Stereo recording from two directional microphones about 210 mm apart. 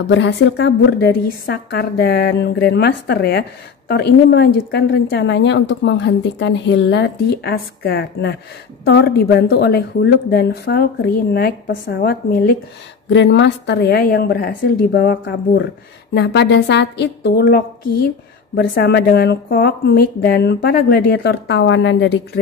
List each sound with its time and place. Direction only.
0.0 s a woman's voice: 60° left (ahead or behind)